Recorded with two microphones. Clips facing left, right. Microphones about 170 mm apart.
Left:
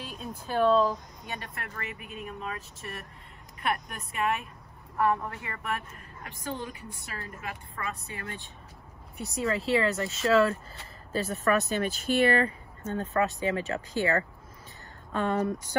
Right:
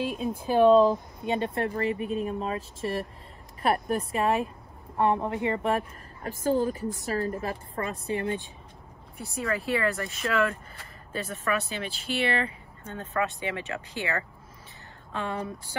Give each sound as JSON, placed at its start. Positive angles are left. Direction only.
{"t": 0.1, "sound": "a woman's voice", "side_deg": -5}
{"t": 9.2, "sound": "speech", "side_deg": 25}